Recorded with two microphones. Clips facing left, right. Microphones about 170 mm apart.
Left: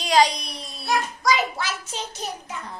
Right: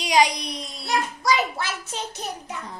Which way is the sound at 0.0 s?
15° right (ahead or behind).